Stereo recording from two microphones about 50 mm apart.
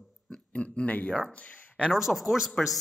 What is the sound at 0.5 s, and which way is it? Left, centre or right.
Speech, left.